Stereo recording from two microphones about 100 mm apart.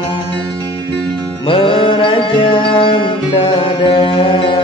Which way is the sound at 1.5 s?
60° left (ahead or behind).